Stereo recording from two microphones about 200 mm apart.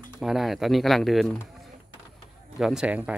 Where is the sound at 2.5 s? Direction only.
Centre (ahead or behind).